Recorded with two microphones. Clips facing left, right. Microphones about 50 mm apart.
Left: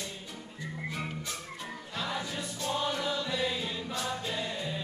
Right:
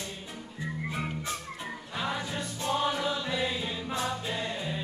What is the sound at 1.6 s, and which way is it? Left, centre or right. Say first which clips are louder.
Music: right 3 dB; centre.